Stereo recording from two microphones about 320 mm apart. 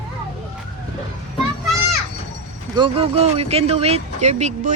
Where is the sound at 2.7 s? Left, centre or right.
Centre.